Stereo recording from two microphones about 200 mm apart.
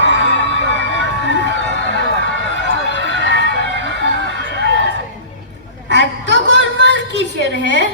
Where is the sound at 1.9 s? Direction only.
65° left (ahead or behind).